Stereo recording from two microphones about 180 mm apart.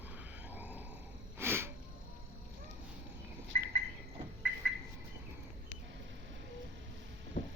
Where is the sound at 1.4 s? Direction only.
15° right (ahead or behind).